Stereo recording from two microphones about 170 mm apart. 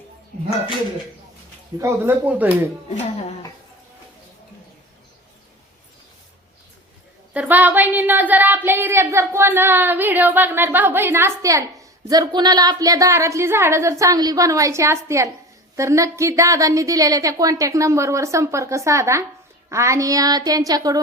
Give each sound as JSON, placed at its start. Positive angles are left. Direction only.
{"t": 1.8, "sound": "speech", "side_deg": -15}
{"t": 7.3, "sound": "speech", "side_deg": -10}
{"t": 19.7, "sound": "child singing", "side_deg": -15}